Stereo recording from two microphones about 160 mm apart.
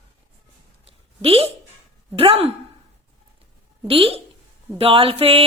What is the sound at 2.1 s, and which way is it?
Speech, 35° right (ahead or behind).